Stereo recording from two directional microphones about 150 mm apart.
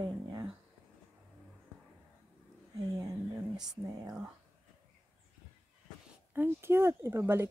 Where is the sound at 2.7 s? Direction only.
25° right (ahead or behind).